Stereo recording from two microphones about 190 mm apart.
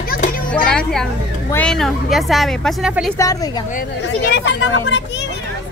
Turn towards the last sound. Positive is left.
turn(degrees=80)